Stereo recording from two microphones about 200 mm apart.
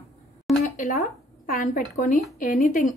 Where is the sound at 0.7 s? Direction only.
40° left (ahead or behind).